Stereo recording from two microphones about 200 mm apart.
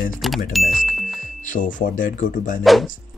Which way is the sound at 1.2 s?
40° left (ahead or behind).